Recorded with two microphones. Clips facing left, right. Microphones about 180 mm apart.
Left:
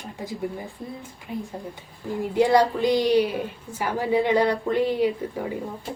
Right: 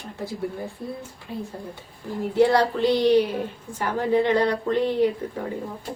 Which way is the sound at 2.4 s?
10° left (ahead or behind).